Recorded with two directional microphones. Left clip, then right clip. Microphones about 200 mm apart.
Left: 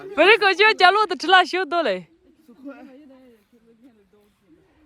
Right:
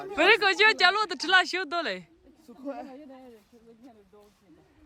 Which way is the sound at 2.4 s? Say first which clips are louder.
Right 3 dB; 30° right (ahead or behind).